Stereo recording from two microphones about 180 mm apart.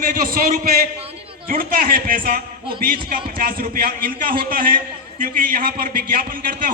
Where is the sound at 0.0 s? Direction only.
50° right (ahead or behind).